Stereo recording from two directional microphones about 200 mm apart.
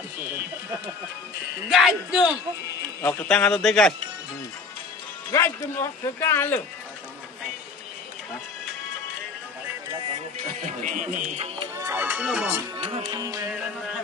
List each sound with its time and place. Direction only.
1.7 s a man's voice: centre (ahead or behind)
3.0 s a man's voice: 10° left (ahead or behind)
5.3 s speech: 15° left (ahead or behind)
10.8 s speech: 40° right (ahead or behind)
11.7 s speech: 15° right (ahead or behind)
12.7 s music: 25° right (ahead or behind)